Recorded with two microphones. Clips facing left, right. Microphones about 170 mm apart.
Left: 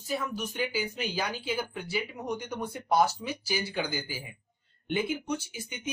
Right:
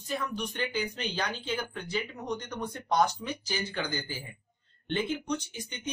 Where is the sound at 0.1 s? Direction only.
5° left (ahead or behind).